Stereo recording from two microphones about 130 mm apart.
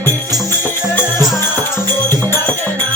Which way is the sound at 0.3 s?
25° right (ahead or behind).